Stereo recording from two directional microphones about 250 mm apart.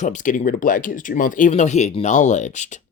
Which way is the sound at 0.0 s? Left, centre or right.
Left.